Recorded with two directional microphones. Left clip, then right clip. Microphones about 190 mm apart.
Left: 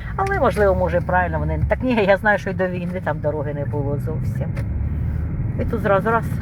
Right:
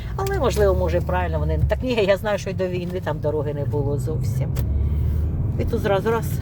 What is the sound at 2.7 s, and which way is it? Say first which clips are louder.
Speech: left 1 dB; 10° right (ahead or behind).